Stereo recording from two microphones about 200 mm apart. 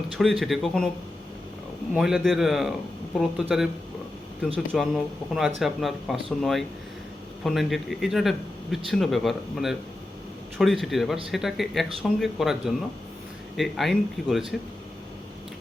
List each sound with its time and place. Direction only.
0.2 s speech: centre (ahead or behind)
1.9 s speech: 5° right (ahead or behind)